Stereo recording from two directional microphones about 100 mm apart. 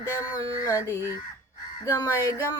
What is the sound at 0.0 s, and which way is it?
Speech, 30° left (ahead or behind).